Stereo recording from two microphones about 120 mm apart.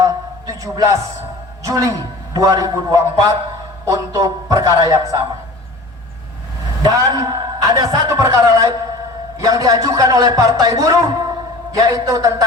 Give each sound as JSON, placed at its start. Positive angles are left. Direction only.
{"t": 0.0, "sound": "a sound", "side_deg": -30}
{"t": 1.6, "sound": "a man's voice", "side_deg": -30}
{"t": 6.8, "sound": "a man's voice", "side_deg": -30}